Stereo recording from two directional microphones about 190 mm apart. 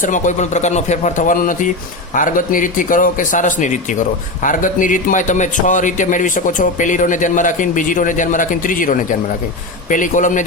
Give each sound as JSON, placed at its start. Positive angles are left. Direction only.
{"t": 0.0, "sound": "a man's voice", "side_deg": 40}